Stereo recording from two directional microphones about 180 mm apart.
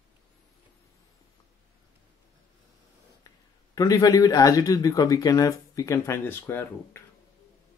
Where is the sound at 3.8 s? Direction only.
20° left (ahead or behind).